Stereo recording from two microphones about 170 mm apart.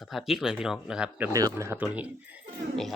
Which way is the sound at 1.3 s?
20° right (ahead or behind).